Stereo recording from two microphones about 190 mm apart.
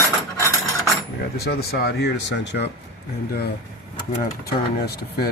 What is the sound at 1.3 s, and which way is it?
Speech, 55° left (ahead or behind).